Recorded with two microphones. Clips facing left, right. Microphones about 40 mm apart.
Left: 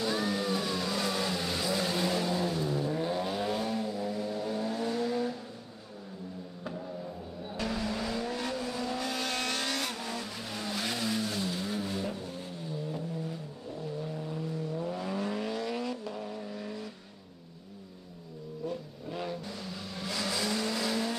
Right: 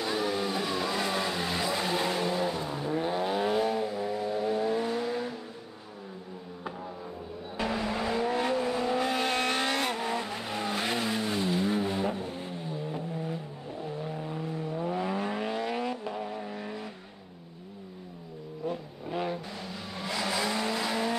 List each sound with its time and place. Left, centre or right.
0.0 s vehicle: centre
7.5 s vehicle: right
18.7 s vehicle: right